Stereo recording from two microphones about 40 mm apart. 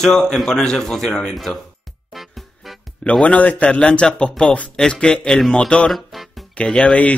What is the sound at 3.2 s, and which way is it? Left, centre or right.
A man's voice, left.